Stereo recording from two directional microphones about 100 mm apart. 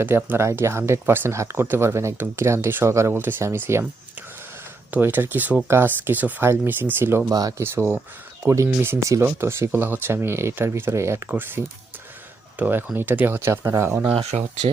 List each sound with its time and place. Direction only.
0.3 s speech: 25° right (ahead or behind)
4.9 s speech: 20° right (ahead or behind)
7.3 s speech: 40° right (ahead or behind)
8.4 s speech: 25° right (ahead or behind)
14.2 s speech: 90° right